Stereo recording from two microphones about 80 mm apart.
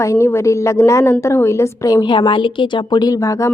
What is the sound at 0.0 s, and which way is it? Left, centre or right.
A woman's voice, left.